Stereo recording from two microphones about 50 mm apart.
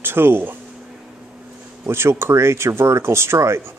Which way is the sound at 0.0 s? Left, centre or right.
Right.